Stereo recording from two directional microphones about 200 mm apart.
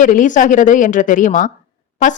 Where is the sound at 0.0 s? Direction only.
40° left (ahead or behind).